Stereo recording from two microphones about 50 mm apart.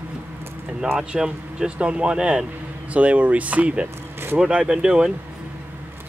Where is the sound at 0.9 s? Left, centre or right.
Centre.